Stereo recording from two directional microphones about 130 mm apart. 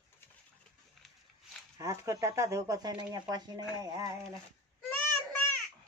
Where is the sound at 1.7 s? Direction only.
25° right (ahead or behind).